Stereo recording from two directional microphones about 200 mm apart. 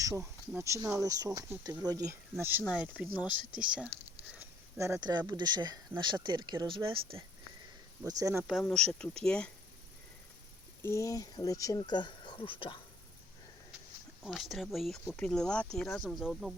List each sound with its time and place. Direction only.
0.0 s speech: 15° right (ahead or behind)
4.8 s speech: 15° right (ahead or behind)
8.0 s speech: 15° right (ahead or behind)
8.6 s speech: 5° left (ahead or behind)
10.8 s speech: 15° left (ahead or behind)
14.3 s speech: centre (ahead or behind)